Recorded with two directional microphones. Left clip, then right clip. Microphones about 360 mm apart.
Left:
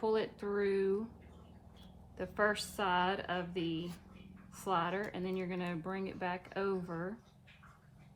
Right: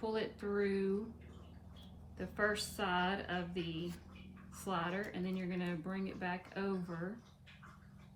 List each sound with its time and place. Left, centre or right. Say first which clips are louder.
0.0 s speech: left 5 dB; centre
2.1 s a woman's voice: left 3 dB; centre